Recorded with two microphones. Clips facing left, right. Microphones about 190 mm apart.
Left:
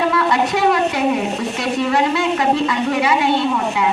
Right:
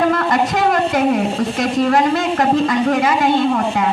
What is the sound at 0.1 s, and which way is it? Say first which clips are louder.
A woman's voice: right 1 dB; 45° right (ahead or behind).